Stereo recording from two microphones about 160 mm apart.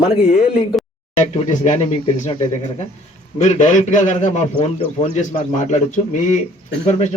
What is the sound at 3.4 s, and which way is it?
A man's voice, 50° left (ahead or behind).